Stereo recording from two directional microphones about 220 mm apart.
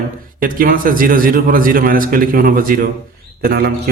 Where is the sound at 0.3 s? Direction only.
40° right (ahead or behind).